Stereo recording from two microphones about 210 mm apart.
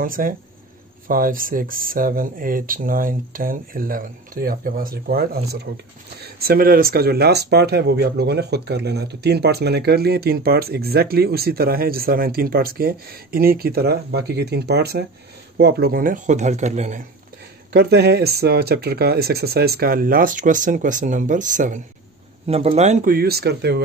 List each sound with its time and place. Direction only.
0.0 s speech: 40° right (ahead or behind)
17.7 s speech: 50° right (ahead or behind)